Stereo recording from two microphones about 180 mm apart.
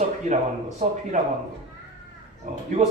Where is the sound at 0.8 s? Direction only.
40° right (ahead or behind).